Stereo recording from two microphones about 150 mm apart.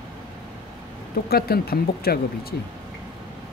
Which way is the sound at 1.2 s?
90° left.